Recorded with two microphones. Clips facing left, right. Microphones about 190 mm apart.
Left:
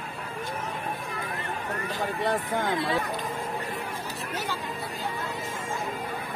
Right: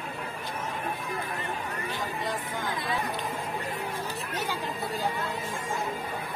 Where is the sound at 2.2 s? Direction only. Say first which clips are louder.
Left 6 dB; 60° left (ahead or behind).